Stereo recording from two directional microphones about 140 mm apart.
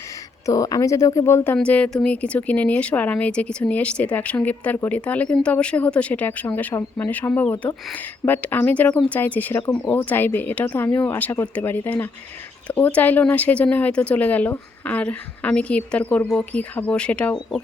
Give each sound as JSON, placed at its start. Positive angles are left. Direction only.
{"t": 0.4, "sound": "a woman's voice", "side_deg": 25}